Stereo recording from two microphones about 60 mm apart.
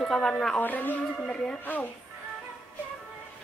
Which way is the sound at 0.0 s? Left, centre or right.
Centre.